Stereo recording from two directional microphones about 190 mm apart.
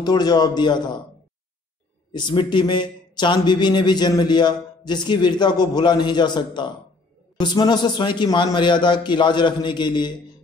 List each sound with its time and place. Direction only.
0.0 s a man's voice: 20° left (ahead or behind)
2.1 s a man's voice: 25° left (ahead or behind)